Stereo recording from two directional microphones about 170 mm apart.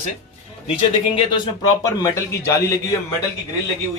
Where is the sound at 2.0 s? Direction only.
20° left (ahead or behind).